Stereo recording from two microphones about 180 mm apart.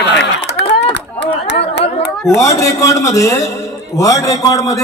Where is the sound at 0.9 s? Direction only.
75° left (ahead or behind).